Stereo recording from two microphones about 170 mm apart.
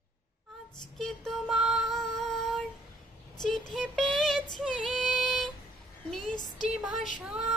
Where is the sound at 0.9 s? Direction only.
Centre (ahead or behind).